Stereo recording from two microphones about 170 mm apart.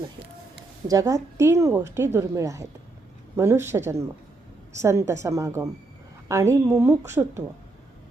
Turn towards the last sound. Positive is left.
turn(degrees=-15)  # may be behind; listen again after turning